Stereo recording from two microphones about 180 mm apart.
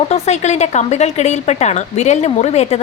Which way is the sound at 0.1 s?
40° left (ahead or behind).